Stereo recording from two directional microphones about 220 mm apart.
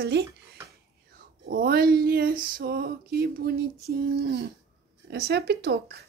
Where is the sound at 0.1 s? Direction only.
50° right (ahead or behind).